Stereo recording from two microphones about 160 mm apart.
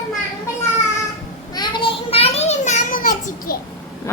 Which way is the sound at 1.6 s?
30° left (ahead or behind).